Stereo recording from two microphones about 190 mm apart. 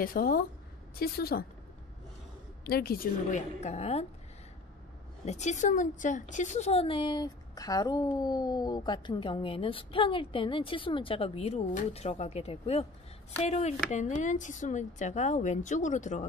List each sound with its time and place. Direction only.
0.0 s a woman's voice: 50° left (ahead or behind)
2.6 s speech: 55° left (ahead or behind); by 4.0 s 35° left (ahead or behind)
5.2 s speech: 35° left (ahead or behind)